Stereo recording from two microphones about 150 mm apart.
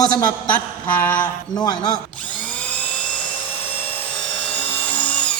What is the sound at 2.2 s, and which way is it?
Dental drill, 10° left (ahead or behind).